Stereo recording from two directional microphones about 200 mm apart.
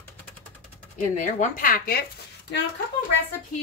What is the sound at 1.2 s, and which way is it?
Speech, 40° left (ahead or behind).